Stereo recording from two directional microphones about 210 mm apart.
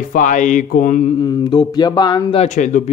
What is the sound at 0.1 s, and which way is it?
Speech, 40° left (ahead or behind).